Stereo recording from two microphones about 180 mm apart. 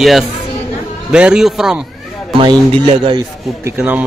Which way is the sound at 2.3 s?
30° right (ahead or behind).